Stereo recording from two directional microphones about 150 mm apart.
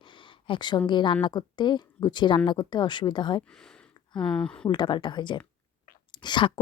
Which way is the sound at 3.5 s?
5° left (ahead or behind).